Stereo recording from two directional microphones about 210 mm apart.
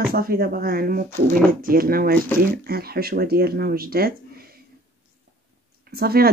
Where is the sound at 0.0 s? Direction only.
45° right (ahead or behind).